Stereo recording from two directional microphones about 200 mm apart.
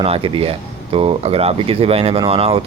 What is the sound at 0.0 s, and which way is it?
Speech, 30° right (ahead or behind).